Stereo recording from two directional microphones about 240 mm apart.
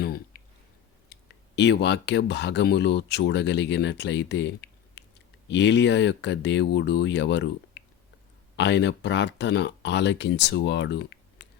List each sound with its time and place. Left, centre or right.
1.1 s speech: left
8.5 s speech: left